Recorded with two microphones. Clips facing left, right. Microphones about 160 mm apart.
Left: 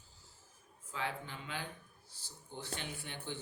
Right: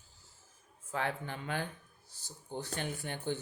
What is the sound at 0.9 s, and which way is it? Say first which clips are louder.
Speech: right 5 dB; 55° right (ahead or behind).